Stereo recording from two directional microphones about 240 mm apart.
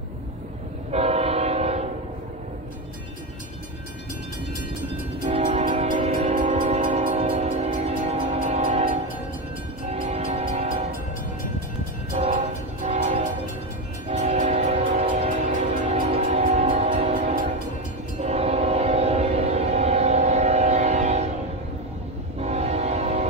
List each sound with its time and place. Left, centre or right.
0.9 s train: right
5.3 s train: right
12.2 s train: right
14.1 s train: right
22.4 s train: right